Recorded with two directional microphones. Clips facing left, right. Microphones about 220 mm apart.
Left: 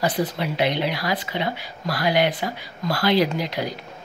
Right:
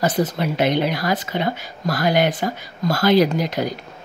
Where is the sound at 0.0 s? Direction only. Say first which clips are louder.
Right 3 dB; 45° right (ahead or behind).